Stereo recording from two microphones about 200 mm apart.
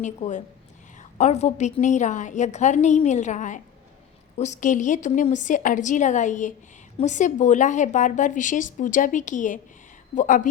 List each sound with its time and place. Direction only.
0.0 s a woman's voice: 40° left (ahead or behind)